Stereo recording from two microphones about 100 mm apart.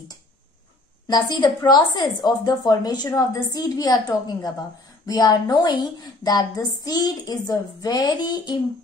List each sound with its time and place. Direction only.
1.0 s a woman's voice: 45° left (ahead or behind)